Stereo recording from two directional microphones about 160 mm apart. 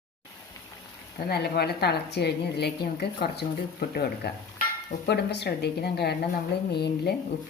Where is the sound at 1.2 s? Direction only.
90° left.